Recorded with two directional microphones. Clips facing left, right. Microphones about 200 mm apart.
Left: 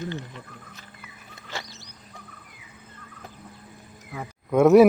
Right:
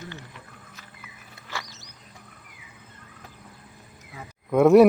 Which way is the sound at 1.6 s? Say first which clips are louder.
Left 2 dB; 45° right (ahead or behind).